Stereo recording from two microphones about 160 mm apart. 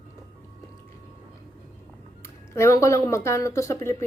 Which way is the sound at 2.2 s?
15° left (ahead or behind).